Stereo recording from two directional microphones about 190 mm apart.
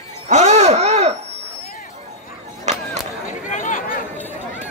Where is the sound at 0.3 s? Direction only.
35° right (ahead or behind).